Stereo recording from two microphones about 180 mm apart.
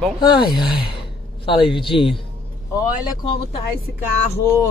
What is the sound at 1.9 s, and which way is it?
Speech, 30° left (ahead or behind).